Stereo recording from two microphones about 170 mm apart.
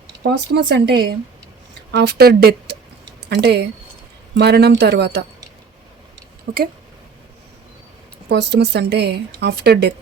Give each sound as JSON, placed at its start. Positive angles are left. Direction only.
{"t": 0.2, "sound": "a woman's voice", "side_deg": -80}
{"t": 6.5, "sound": "a woman's voice", "side_deg": -70}
{"t": 8.3, "sound": "a woman's voice", "side_deg": -80}